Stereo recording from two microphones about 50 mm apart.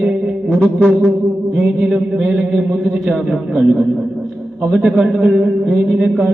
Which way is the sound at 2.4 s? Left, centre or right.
Centre.